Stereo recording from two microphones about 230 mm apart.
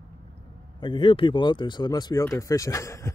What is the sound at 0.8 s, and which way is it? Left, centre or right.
Speech, left.